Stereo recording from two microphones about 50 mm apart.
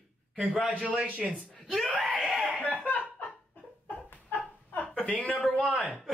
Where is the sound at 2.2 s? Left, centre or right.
Centre.